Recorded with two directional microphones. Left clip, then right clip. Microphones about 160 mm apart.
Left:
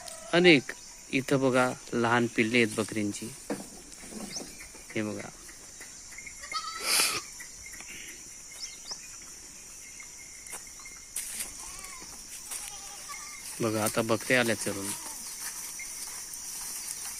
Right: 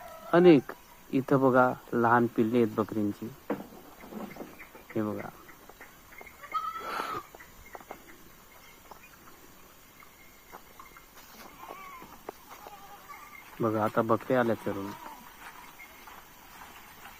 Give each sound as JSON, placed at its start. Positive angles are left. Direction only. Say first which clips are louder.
{"t": 0.3, "sound": "speech", "louder": "right 1 dB", "side_deg": 20}
{"t": 5.0, "sound": "speech", "louder": "right 2 dB", "side_deg": 15}
{"t": 6.5, "sound": "goat", "louder": "left 2 dB", "side_deg": 30}
{"t": 13.6, "sound": "speech", "louder": "right 1 dB", "side_deg": 25}